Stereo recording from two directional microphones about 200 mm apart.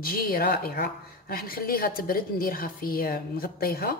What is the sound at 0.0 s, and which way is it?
A woman's voice, 45° left (ahead or behind).